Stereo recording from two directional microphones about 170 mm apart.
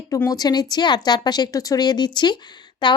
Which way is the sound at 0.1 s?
20° left (ahead or behind).